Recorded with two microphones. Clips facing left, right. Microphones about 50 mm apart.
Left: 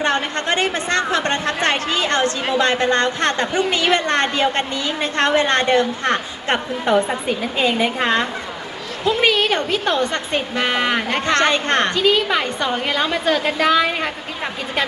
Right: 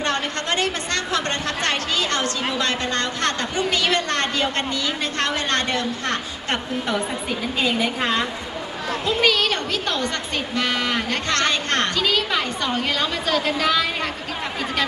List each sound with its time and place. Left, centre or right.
0.0 s speech: left
7.6 s a woman's voice: centre
9.0 s speech: left